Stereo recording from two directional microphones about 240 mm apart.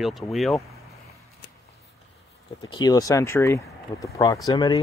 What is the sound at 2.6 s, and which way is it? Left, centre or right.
Speech, centre.